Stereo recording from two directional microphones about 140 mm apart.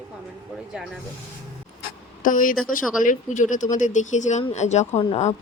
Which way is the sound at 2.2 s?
70° left (ahead or behind).